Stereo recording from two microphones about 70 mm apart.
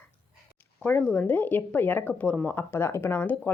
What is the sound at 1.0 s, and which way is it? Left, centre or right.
Speech, left.